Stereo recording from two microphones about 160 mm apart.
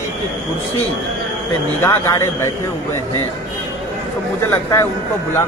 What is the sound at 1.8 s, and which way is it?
Speech, 20° left (ahead or behind).